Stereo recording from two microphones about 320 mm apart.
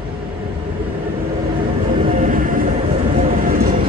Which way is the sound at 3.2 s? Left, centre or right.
Right.